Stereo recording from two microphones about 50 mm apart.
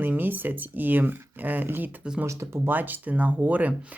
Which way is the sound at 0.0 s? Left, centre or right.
Right.